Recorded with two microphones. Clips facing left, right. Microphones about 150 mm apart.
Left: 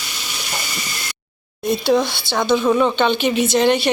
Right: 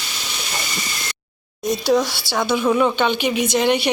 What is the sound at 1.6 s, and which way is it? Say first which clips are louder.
Speech: left 2 dB; 40° right (ahead or behind).